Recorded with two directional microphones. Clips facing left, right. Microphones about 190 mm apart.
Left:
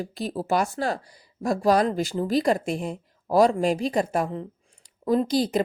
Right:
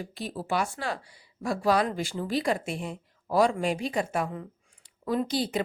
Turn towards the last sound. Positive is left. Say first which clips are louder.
# left 6 dB
turn(degrees=40)  # may be behind; listen again after turning